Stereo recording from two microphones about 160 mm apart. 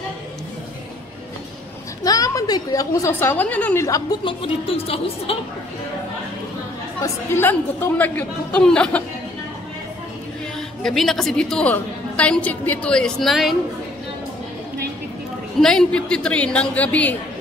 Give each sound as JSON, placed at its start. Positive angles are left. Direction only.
{"t": 2.0, "sound": "a woman's voice", "side_deg": 20}
{"t": 7.0, "sound": "a woman's voice", "side_deg": 15}
{"t": 10.8, "sound": "a woman's voice", "side_deg": 0}
{"t": 15.6, "sound": "a woman's voice", "side_deg": 5}